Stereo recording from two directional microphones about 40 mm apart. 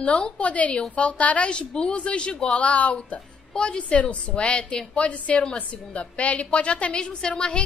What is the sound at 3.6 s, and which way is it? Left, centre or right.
A woman's voice, left.